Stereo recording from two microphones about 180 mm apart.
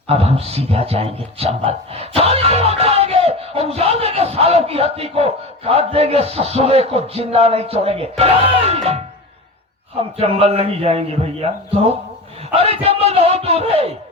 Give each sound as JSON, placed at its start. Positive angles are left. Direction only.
{"t": 0.1, "sound": "a man's voice", "side_deg": -35}
{"t": 10.2, "sound": "a man's voice", "side_deg": -35}